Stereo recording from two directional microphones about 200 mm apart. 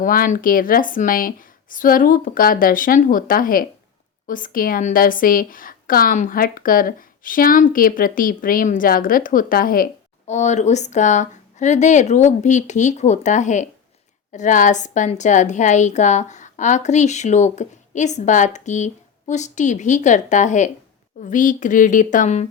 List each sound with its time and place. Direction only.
0.0 s a woman's voice: 45° left (ahead or behind)